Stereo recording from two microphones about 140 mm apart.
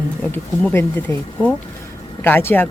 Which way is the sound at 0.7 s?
15° left (ahead or behind).